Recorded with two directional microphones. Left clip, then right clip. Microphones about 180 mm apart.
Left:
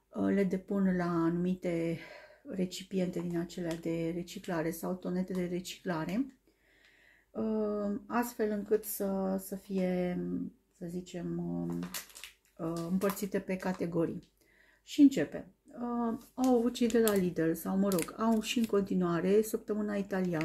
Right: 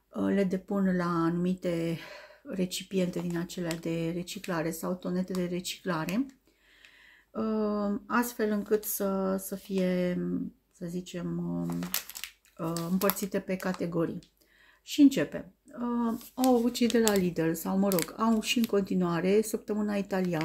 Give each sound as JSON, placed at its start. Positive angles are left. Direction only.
{"t": 0.1, "sound": "speech", "side_deg": -10}
{"t": 7.3, "sound": "speech", "side_deg": -20}